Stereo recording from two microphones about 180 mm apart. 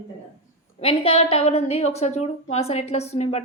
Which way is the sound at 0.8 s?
30° left (ahead or behind).